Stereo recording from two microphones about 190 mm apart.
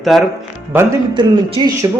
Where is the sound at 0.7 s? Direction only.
15° right (ahead or behind).